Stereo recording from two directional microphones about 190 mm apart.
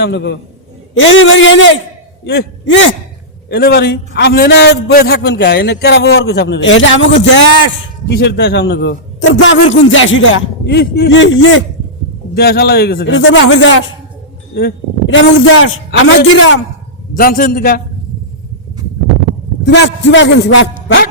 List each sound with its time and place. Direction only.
0.0 s a man's voice: 65° left (ahead or behind)
0.9 s a man's voice: 85° left
2.2 s a man's voice: 60° left (ahead or behind)
9.8 s a man's voice: 90° left
12.3 s a man's voice: 55° left (ahead or behind)
13.1 s a man's voice: 85° left
15.1 s a man's voice: 90° left
17.2 s a man's voice: 50° left (ahead or behind)
19.6 s a man's voice: 65° left (ahead or behind)
20.8 s music: 65° left (ahead or behind)